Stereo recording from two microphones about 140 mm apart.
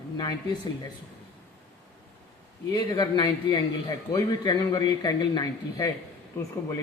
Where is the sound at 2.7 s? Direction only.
30° left (ahead or behind).